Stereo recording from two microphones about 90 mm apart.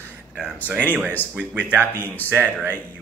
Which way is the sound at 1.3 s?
10° right (ahead or behind).